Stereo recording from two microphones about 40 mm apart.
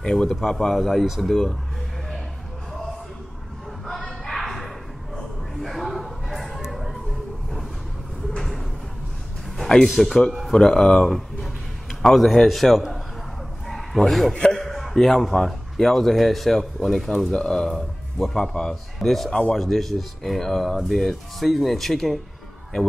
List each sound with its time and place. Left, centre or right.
0.0 s a man's voice: centre
1.3 s a man's voice: centre
3.8 s a sound: centre
6.6 s music: centre
9.8 s speech: centre
10.5 s speech: centre
11.1 s a sound: centre
12.0 s a man's voice: centre
13.7 s a sound: centre
14.5 s speech: centre
17.3 s a man's voice: centre
17.6 s speech: centre
18.4 s speech: centre
18.9 s a man's voice: centre